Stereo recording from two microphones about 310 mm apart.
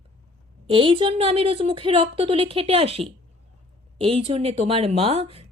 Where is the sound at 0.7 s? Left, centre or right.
Centre.